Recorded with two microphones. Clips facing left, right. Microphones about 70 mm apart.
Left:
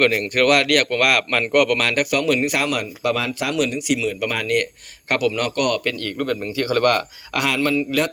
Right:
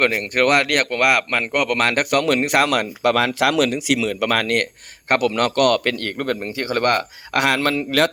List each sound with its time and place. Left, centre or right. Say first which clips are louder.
0.0 s speech: left 1 dB; right
5.0 s speech: right 2 dB; right
6.6 s speech: left 2 dB; right
7.3 s speech: right 1 dB; right